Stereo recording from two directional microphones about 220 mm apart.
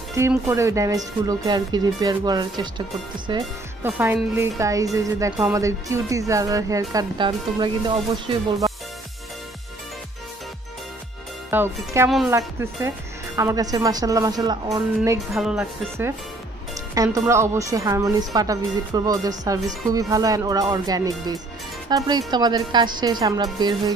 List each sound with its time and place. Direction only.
0.5 s speech: 15° right (ahead or behind)
3.8 s speech: 10° right (ahead or behind)
11.5 s speech: 10° right (ahead or behind)
15.3 s speech: centre (ahead or behind); by 23.8 s 20° right (ahead or behind)